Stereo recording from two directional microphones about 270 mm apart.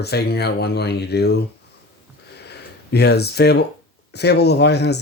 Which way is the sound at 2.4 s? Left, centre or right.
Left.